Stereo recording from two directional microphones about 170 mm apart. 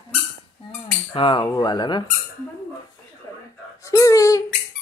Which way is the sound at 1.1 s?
30° left (ahead or behind).